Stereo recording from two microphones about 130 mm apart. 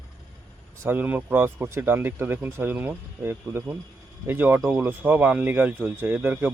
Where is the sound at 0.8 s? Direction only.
15° right (ahead or behind).